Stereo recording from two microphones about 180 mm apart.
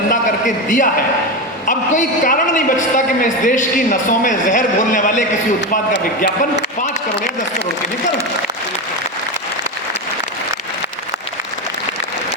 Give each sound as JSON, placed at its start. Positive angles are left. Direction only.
{"t": 0.1, "sound": "a woman's voice", "side_deg": 45}